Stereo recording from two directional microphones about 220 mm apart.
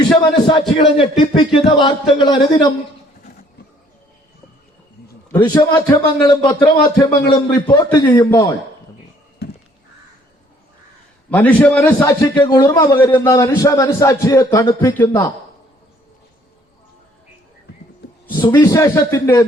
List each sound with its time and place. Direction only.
0.0 s a man's voice: 20° left (ahead or behind)
5.3 s a man's voice: 15° left (ahead or behind)
11.3 s a man's voice: 10° left (ahead or behind)
18.3 s a man's voice: 20° left (ahead or behind)